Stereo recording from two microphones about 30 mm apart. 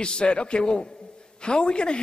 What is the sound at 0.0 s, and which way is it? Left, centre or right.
A woman's voice, left.